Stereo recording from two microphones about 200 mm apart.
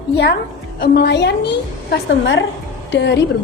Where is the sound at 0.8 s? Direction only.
55° left (ahead or behind).